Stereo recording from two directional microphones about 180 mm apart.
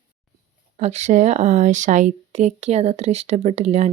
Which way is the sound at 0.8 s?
40° right (ahead or behind).